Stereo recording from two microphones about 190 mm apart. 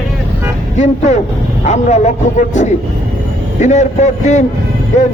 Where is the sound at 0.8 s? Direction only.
40° left (ahead or behind).